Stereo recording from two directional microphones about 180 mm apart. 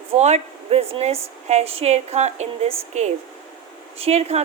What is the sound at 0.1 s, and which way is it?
Speech, 40° right (ahead or behind).